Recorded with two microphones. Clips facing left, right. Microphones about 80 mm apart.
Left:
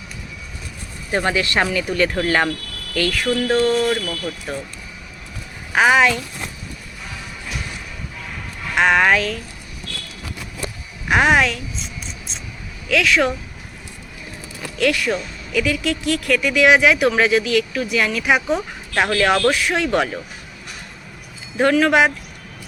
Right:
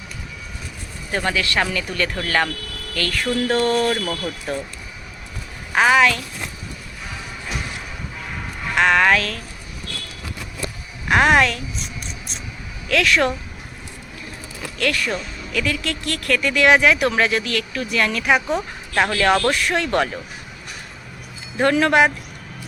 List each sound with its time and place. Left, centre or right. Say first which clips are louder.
1.1 s speech: left 2 dB; left; by 4.0 s centre
5.7 s speech: left 1 dB; centre
8.7 s speech: left 1 dB; centre
11.1 s speech: even; centre
12.9 s speech: left 1 dB; centre
14.8 s speech: left 4 dB; centre
21.6 s speech: left 1 dB; centre